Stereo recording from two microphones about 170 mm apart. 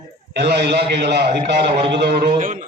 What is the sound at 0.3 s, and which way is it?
Speech, 75° right (ahead or behind).